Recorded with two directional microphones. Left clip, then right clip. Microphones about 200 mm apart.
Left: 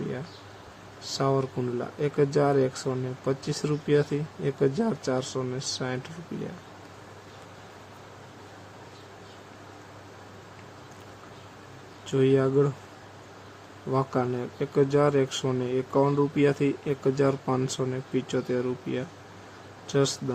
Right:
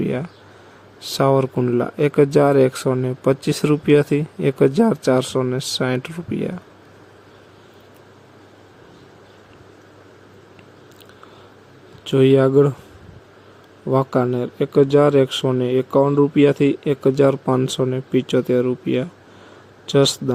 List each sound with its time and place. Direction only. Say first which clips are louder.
1.1 s speech: right 10 dB; 35° right (ahead or behind)
12.0 s a man's voice: right 9 dB; 30° right (ahead or behind)
13.9 s a man's voice: right 9 dB; 25° right (ahead or behind)